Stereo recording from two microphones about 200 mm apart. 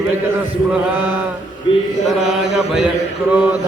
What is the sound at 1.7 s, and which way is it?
Mantra, 25° left (ahead or behind).